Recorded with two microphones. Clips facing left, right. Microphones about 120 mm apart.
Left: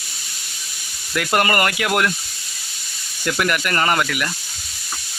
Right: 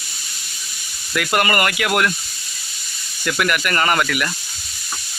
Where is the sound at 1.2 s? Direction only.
30° left (ahead or behind).